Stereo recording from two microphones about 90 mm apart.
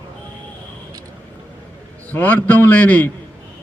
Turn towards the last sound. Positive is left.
turn(degrees=15)  # may be behind; listen again after turning